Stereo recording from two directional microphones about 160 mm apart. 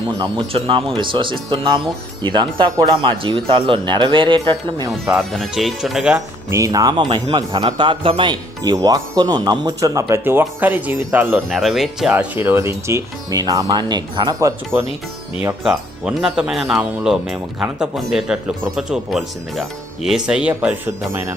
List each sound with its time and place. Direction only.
0.2 s speech: 35° right (ahead or behind)
5.1 s speech: centre (ahead or behind)
6.1 s a man's voice: 20° right (ahead or behind)
11.4 s speech: centre (ahead or behind)
12.1 s a man's voice: 10° right (ahead or behind)
15.6 s speech: 5° right (ahead or behind)